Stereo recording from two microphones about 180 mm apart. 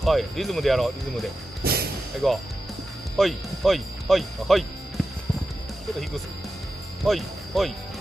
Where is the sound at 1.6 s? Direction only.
60° right (ahead or behind).